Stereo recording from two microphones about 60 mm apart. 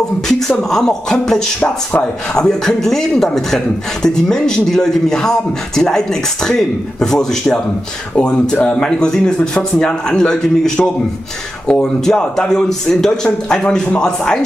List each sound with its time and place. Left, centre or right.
0.3 s a man's voice: centre
1.6 s speech: left
2.3 s a man's voice: centre